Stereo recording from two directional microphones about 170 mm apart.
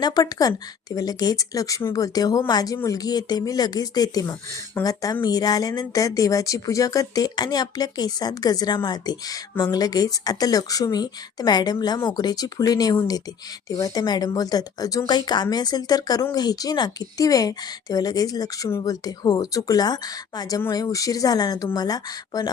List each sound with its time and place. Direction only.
0.0 s speech: 20° left (ahead or behind)